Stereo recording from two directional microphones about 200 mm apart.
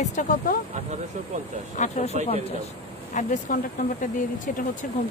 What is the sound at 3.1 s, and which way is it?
Speech, 40° left (ahead or behind).